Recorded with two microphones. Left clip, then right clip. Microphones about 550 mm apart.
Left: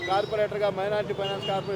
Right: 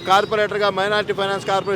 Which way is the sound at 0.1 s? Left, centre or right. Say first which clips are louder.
Right 10 dB; right.